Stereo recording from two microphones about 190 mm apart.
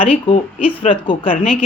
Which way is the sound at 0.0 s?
30° left (ahead or behind).